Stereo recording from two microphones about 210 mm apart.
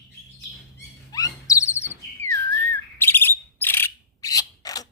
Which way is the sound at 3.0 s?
10° left (ahead or behind).